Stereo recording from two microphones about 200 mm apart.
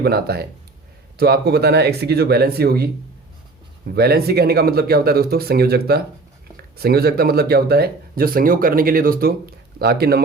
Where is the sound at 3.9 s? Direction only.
50° right (ahead or behind).